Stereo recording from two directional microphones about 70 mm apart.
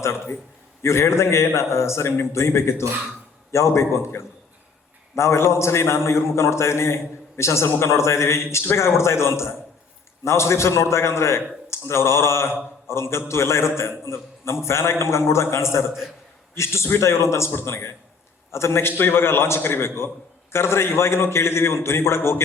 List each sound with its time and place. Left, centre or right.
0.0 s a man's voice: left